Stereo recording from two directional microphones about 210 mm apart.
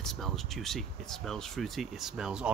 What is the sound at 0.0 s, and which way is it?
Speech, centre (ahead or behind).